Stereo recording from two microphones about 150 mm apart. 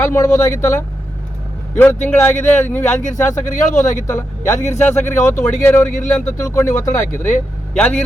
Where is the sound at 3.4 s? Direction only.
60° left (ahead or behind).